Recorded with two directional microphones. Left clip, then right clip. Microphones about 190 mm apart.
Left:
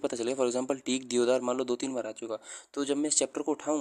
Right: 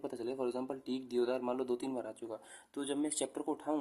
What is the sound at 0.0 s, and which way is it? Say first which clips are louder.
Speech: left 9 dB; 35° left (ahead or behind).